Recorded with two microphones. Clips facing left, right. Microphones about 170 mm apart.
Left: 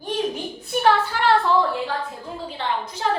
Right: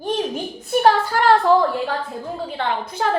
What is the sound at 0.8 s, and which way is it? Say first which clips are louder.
Speech: right 3 dB; 40° right (ahead or behind).